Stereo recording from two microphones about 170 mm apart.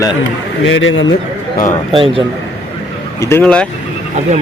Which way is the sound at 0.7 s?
90° left.